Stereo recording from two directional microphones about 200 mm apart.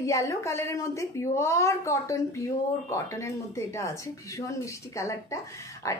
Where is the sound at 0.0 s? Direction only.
15° left (ahead or behind).